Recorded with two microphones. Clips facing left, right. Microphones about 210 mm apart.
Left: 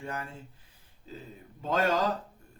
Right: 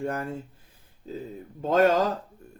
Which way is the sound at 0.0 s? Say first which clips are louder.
Right 8 dB; 45° right (ahead or behind).